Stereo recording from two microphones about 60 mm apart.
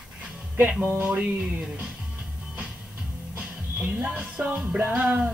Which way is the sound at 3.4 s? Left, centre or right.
Right.